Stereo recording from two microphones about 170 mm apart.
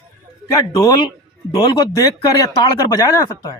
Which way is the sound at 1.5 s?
30° left (ahead or behind).